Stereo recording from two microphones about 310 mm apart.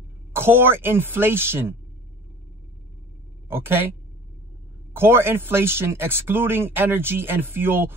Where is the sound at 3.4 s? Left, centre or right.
Centre.